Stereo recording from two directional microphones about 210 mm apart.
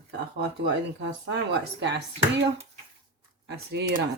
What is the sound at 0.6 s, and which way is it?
Speech, 55° right (ahead or behind).